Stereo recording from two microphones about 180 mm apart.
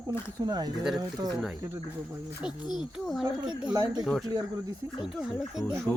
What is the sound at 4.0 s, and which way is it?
Speech, centre (ahead or behind).